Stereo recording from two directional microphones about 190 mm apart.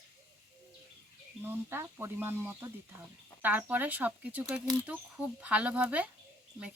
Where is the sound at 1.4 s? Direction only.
10° right (ahead or behind).